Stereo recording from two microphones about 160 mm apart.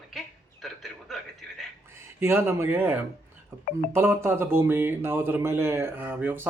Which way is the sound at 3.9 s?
15° right (ahead or behind).